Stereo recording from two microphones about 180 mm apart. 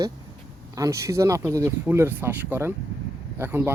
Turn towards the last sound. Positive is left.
turn(degrees=-10)  # may be behind; listen again after turning